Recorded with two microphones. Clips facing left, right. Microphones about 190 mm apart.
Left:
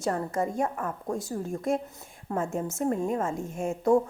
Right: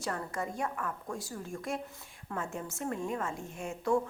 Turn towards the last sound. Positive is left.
turn(degrees=45)  # may be behind; listen again after turning